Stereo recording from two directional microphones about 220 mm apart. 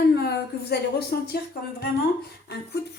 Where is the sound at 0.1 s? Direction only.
50° left (ahead or behind).